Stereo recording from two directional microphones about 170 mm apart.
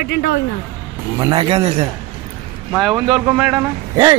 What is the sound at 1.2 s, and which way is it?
Speech, 20° right (ahead or behind).